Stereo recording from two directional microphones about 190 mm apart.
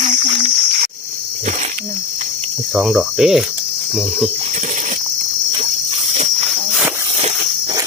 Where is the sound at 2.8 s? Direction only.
Centre (ahead or behind).